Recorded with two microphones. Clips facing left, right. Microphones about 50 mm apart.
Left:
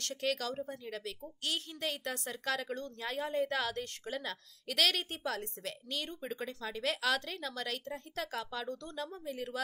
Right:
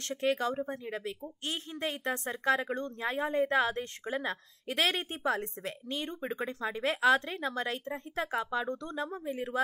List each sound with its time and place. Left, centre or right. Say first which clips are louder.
0.0 s a woman's voice: right 5 dB; right